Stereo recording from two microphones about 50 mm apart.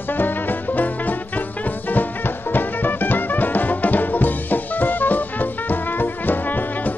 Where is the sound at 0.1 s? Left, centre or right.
Left.